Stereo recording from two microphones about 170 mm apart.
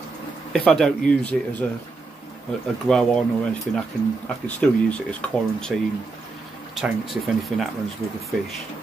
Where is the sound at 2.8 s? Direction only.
5° left (ahead or behind).